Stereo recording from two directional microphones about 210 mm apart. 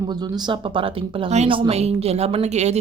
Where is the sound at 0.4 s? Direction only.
25° right (ahead or behind).